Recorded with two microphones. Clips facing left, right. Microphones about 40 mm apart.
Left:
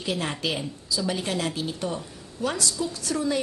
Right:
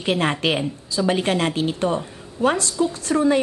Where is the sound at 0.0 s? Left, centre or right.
Right.